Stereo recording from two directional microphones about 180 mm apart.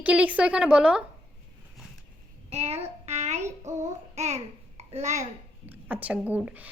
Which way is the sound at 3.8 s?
40° right (ahead or behind).